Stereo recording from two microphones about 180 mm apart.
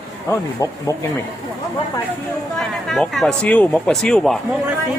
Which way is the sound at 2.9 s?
Centre (ahead or behind).